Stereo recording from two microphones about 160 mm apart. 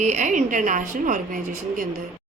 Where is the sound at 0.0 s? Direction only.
50° right (ahead or behind).